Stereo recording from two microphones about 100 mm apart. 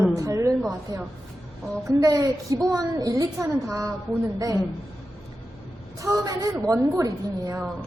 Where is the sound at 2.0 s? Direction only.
35° right (ahead or behind).